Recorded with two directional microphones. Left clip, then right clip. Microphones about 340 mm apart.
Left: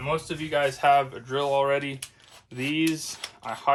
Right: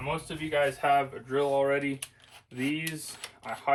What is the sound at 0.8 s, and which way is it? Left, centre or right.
Speech, centre.